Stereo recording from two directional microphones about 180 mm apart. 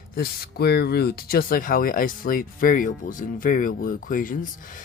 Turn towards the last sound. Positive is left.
turn(degrees=50)  # may be behind; listen again after turning